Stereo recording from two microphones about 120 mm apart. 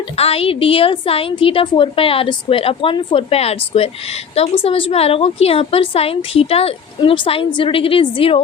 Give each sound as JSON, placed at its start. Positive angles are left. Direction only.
{"t": 0.2, "sound": "a woman's voice", "side_deg": 55}